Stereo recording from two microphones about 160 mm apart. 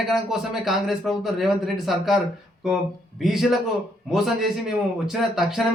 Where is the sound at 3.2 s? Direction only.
Centre (ahead or behind).